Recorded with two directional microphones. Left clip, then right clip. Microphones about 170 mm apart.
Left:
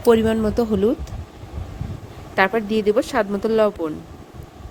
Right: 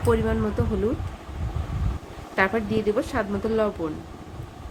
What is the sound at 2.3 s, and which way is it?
Speech, 40° left (ahead or behind).